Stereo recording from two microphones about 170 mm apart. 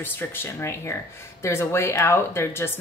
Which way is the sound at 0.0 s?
10° left (ahead or behind).